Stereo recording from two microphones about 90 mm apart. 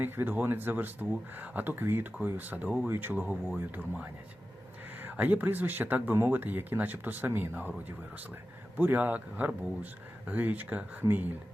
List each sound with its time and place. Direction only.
0.0 s speech: 20° right (ahead or behind)
8.8 s speech: 20° right (ahead or behind)